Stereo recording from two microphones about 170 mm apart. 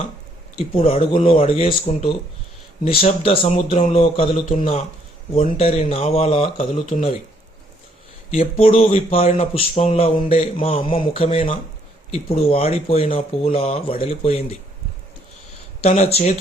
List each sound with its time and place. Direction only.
0.8 s speech: 35° left (ahead or behind)
5.3 s speech: 35° left (ahead or behind)
8.3 s speech: 35° left (ahead or behind)
15.8 s speech: 40° left (ahead or behind)